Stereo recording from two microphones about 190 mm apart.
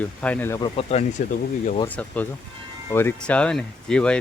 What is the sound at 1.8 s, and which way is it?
Speech, 10° left (ahead or behind).